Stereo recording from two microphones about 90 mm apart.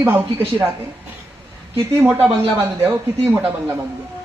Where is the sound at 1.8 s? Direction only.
25° right (ahead or behind).